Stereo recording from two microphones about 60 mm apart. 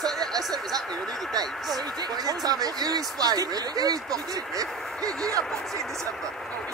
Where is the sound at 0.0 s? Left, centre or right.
Right.